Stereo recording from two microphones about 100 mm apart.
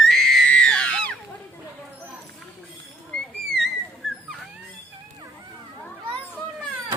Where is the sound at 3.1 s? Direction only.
5° left (ahead or behind).